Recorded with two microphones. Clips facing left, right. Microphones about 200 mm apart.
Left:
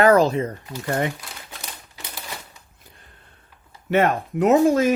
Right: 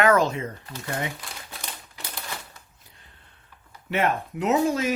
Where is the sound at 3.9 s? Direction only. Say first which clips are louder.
Left 5 dB; 50° left (ahead or behind).